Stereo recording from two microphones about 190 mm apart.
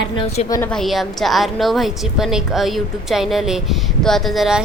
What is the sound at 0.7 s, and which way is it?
A woman's voice, centre (ahead or behind).